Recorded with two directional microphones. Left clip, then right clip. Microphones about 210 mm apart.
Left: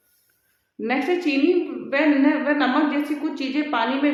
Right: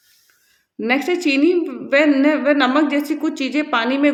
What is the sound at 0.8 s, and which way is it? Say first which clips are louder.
Speech: right 4 dB; 45° right (ahead or behind).